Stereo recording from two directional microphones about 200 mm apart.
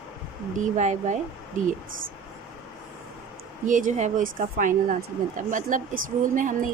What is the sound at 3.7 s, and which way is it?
A woman's voice, 40° right (ahead or behind).